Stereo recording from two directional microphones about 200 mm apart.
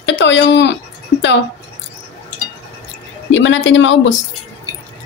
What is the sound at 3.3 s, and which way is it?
Speech, 70° left (ahead or behind).